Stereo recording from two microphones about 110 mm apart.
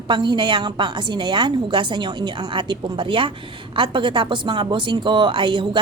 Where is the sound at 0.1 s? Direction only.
45° right (ahead or behind).